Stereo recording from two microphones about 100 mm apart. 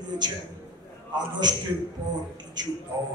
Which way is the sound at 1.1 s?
45° right (ahead or behind).